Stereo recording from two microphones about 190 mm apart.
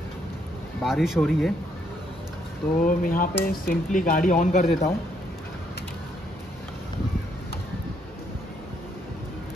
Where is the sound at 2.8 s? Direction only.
45° left (ahead or behind).